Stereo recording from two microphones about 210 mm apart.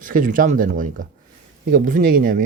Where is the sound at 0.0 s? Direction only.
40° right (ahead or behind).